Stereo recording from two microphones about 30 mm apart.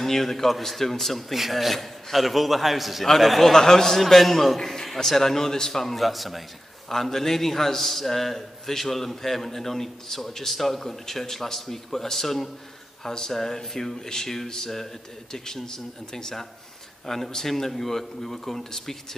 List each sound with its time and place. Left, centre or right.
0.0 s a man's voice: centre
1.3 s a man's voice: centre
3.5 s a man's voice: centre
4.0 s a man's voice: centre
6.9 s a man's voice: centre